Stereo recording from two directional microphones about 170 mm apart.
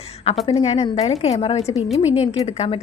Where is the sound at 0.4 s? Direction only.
35° left (ahead or behind).